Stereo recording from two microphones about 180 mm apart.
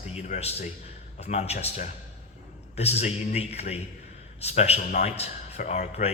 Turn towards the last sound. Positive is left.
turn(degrees=40)  # may be behind; listen again after turning